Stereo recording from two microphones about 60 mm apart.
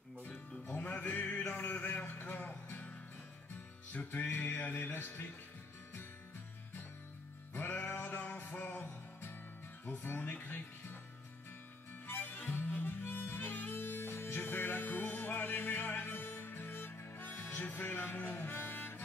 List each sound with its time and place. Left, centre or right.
0.2 s music: left
3.9 s music: left
7.5 s music: left
9.8 s speech: left
12.1 s harmonica: left